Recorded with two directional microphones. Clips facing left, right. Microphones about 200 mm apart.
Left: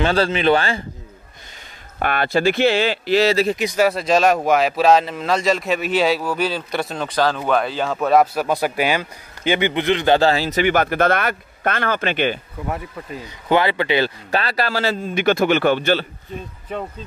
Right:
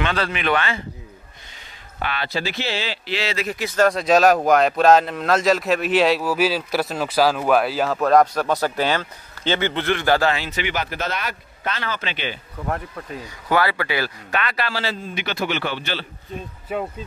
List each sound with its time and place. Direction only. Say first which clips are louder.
0.0 s speech: left 6 dB; 30° left (ahead or behind)
2.0 s speech: left 7 dB; 50° left (ahead or behind); by 3.5 s 35° left (ahead or behind)
3.5 s speech: left 1 dB; 15° left (ahead or behind)
10.3 s speech: left 8 dB; 40° left (ahead or behind)
12.6 s speech: even; 5° left (ahead or behind)
13.5 s speech: left 4 dB; 20° left (ahead or behind); by 16.1 s 50° left (ahead or behind)
16.7 s speech: right 2 dB; 5° right (ahead or behind)